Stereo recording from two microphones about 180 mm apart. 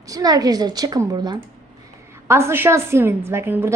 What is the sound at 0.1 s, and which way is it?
A woman's voice, 20° right (ahead or behind).